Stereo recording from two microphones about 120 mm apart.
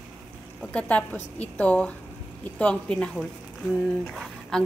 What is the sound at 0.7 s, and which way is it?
A woman's voice, 10° left (ahead or behind).